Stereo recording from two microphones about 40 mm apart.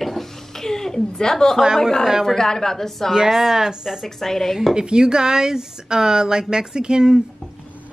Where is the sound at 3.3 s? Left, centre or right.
Centre.